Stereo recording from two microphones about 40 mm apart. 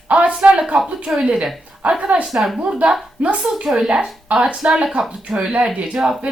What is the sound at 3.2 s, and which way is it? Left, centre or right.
Speech, right.